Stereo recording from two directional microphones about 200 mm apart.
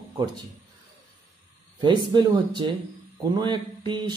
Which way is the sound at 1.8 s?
20° right (ahead or behind).